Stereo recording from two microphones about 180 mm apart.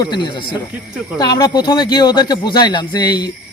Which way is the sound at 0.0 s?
25° left (ahead or behind).